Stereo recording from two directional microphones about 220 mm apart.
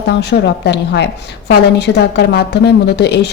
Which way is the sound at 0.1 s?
50° left (ahead or behind).